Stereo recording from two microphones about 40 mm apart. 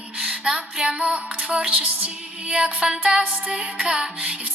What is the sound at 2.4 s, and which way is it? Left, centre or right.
Music, right.